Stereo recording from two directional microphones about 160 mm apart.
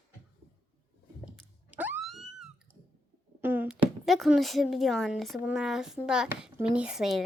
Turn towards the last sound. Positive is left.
turn(degrees=0)  # may be behind; listen again after turning